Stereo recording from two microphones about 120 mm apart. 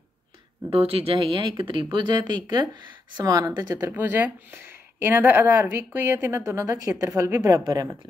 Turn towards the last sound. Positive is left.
turn(degrees=-30)  # may be behind; listen again after turning